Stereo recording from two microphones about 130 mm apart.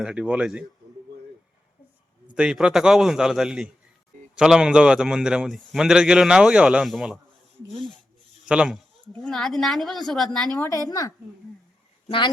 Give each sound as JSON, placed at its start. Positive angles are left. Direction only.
{"t": 0.0, "sound": "a man's voice", "side_deg": -10}
{"t": 2.3, "sound": "a man's voice", "side_deg": -5}
{"t": 8.4, "sound": "a man's voice", "side_deg": -5}
{"t": 9.2, "sound": "a man's voice", "side_deg": 5}
{"t": 10.7, "sound": "a woman's voice", "side_deg": 25}
{"t": 12.0, "sound": "speech", "side_deg": 40}